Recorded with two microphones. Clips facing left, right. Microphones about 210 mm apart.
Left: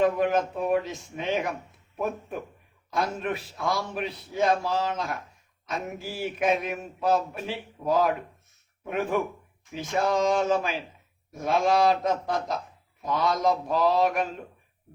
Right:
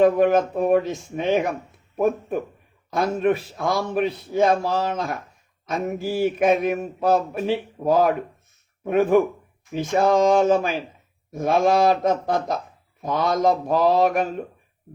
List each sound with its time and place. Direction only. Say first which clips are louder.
0.0 s a man's voice: right 6 dB; 45° right (ahead or behind)